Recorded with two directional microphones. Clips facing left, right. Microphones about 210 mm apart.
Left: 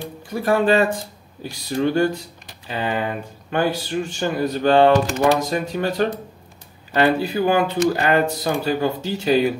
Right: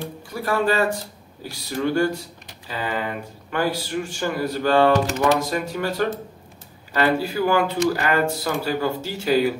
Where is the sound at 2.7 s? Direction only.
25° left (ahead or behind).